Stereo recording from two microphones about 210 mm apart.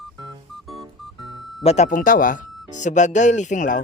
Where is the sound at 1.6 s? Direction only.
35° left (ahead or behind).